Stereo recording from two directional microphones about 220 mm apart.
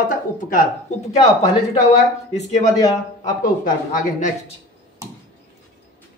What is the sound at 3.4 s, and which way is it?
Speech, 40° left (ahead or behind).